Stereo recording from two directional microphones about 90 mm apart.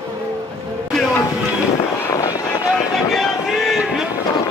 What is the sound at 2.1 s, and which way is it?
Vehicle, 40° left (ahead or behind).